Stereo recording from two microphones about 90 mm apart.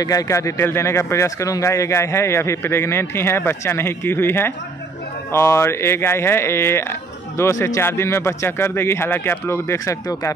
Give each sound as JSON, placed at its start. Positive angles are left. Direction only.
{"t": 0.0, "sound": "speech", "side_deg": 40}